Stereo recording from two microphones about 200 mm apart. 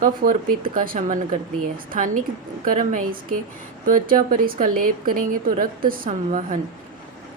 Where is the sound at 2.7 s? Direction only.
40° right (ahead or behind).